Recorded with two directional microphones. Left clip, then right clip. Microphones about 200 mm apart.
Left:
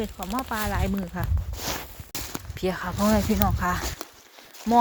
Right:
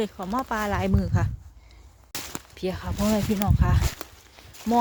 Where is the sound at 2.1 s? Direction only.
35° left (ahead or behind).